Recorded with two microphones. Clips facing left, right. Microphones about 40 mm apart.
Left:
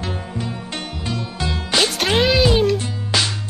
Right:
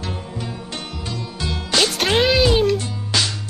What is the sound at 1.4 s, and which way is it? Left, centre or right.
Music, centre.